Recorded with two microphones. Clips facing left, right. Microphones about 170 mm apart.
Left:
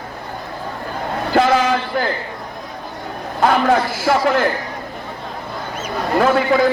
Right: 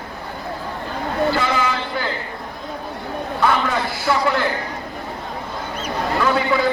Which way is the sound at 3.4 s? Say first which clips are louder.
Left 5 dB; 55° left (ahead or behind).